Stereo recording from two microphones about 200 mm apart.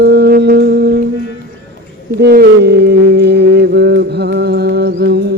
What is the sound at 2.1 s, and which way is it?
Mantra, 50° right (ahead or behind).